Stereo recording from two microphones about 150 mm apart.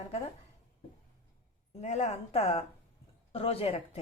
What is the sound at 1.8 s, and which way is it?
A woman's voice, 50° left (ahead or behind).